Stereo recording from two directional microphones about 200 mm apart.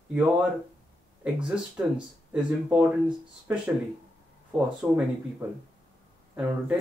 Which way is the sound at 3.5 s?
10° right (ahead or behind).